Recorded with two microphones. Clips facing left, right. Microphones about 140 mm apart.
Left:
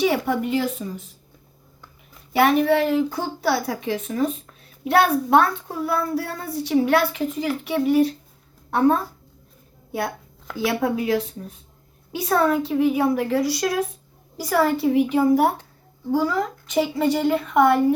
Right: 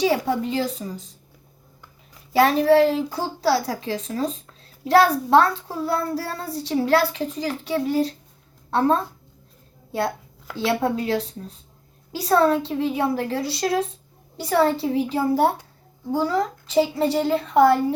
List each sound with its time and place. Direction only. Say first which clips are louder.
0.3 s a child's voice: left 1 dB; 30° right (ahead or behind)
2.3 s a child's voice: right 2 dB; 35° right (ahead or behind)
10.6 s a child's voice: even; 30° right (ahead or behind)